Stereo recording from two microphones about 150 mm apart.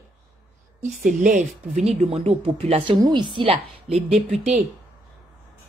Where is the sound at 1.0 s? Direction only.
65° right (ahead or behind).